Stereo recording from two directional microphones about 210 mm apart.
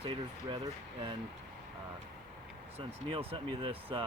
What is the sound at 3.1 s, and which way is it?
Speech, 25° right (ahead or behind).